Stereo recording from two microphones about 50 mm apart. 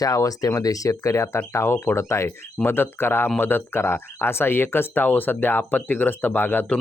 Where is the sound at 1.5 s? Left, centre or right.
Left.